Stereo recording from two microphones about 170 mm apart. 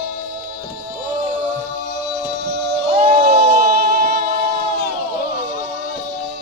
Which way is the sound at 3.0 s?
40° right (ahead or behind).